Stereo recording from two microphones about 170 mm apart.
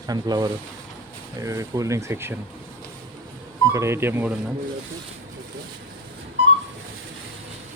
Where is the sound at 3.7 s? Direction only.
15° right (ahead or behind).